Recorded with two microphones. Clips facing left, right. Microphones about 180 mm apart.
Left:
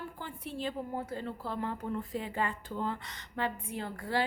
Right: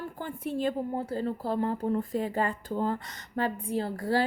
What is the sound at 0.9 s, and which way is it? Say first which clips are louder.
Speech: right 6 dB; 30° right (ahead or behind).